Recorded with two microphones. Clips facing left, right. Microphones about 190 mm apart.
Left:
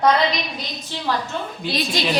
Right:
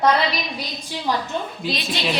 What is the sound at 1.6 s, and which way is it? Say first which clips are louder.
Speech: left 2 dB; centre (ahead or behind).